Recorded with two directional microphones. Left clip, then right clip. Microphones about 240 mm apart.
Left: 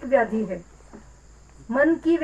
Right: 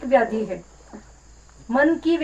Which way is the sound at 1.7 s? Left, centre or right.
Right.